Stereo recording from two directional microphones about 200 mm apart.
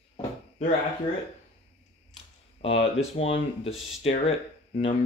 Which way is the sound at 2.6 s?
30° left (ahead or behind).